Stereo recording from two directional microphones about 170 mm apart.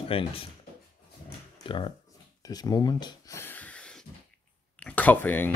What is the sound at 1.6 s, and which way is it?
Speech, 30° left (ahead or behind).